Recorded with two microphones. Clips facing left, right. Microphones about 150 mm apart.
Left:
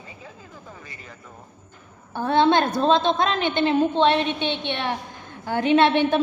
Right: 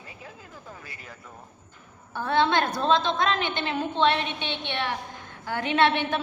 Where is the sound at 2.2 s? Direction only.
25° left (ahead or behind).